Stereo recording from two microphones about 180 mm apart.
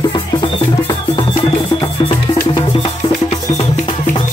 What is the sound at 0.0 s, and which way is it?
Music, 25° left (ahead or behind).